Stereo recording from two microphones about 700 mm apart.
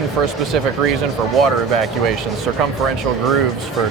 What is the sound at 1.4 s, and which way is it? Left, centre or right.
Speech, right.